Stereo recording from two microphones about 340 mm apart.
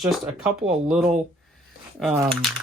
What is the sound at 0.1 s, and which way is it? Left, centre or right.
Speech, centre.